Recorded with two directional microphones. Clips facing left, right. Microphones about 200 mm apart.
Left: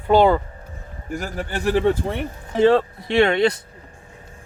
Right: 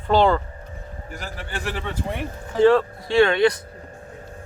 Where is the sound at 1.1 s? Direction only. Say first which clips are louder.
Left 7 dB; 45° left (ahead or behind).